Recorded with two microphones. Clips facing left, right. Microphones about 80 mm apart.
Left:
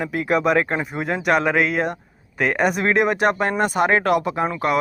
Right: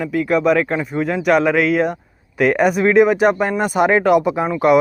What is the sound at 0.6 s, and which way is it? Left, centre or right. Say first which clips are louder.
Speech: right 2 dB; centre.